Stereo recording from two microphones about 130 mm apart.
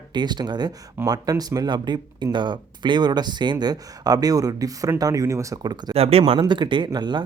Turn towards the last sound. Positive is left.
turn(degrees=-35)  # may be behind; listen again after turning